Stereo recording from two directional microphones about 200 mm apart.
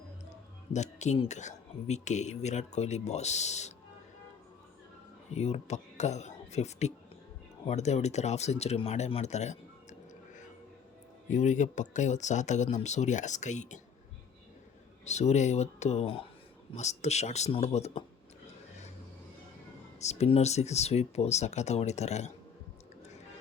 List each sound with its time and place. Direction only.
0.7 s speech: 35° left (ahead or behind)
5.3 s speech: 35° left (ahead or behind)
11.3 s speech: 35° left (ahead or behind)
15.0 s speech: 35° left (ahead or behind)
20.0 s speech: 35° left (ahead or behind)